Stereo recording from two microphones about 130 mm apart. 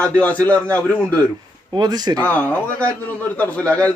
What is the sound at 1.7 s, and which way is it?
Speech, 30° right (ahead or behind).